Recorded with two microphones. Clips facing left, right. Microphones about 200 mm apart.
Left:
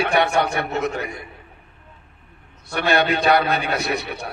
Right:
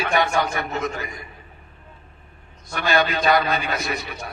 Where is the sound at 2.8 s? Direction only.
65° left (ahead or behind).